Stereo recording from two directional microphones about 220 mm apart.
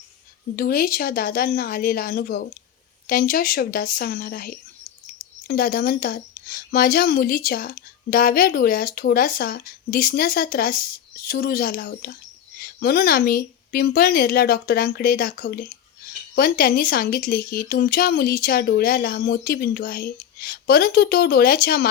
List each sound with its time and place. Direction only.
0.5 s speech: 40° left (ahead or behind)